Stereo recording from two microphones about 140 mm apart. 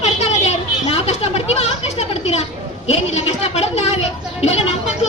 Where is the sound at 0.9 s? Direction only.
50° left (ahead or behind).